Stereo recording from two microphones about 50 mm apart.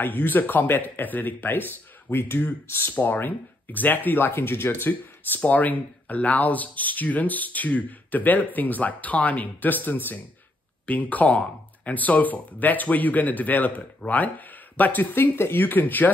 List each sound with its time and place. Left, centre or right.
0.0 s speech: left
15.3 s speech: left